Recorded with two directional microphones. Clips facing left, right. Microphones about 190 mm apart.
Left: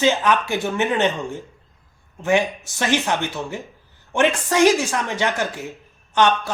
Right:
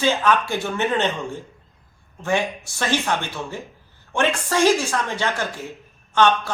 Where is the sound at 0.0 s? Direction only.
15° left (ahead or behind).